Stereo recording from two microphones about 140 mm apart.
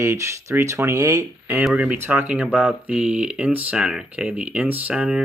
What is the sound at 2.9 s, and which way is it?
Speech, 10° right (ahead or behind).